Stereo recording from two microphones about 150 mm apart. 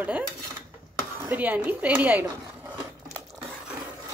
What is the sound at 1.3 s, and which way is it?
Speech, 10° right (ahead or behind).